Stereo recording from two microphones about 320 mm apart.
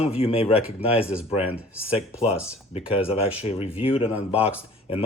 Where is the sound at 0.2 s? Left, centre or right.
Centre.